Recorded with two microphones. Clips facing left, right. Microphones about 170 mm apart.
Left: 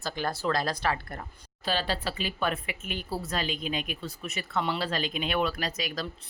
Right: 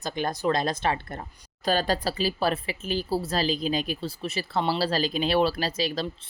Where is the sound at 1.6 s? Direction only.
45° right (ahead or behind).